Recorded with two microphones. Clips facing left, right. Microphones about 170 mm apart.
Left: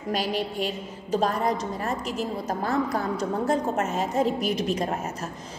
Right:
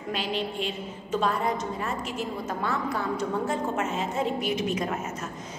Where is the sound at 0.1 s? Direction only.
40° left (ahead or behind).